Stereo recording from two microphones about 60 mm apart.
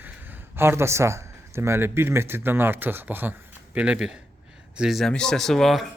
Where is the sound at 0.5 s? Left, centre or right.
Right.